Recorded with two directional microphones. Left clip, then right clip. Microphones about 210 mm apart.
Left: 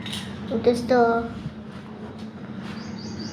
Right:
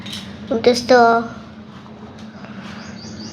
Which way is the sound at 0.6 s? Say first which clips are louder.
Right 7 dB; 45° right (ahead or behind).